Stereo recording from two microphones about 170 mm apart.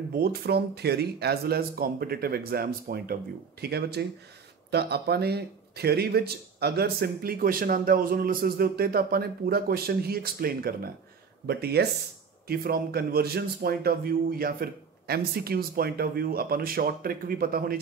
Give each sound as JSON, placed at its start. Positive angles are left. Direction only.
{"t": 0.1, "sound": "speech", "side_deg": -65}